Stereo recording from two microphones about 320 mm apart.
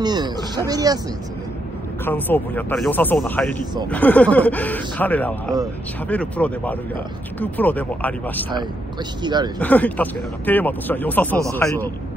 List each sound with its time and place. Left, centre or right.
0.0 s a sound: centre
0.7 s speech: centre
2.0 s speech: centre
9.2 s speech: centre
9.6 s a man's voice: centre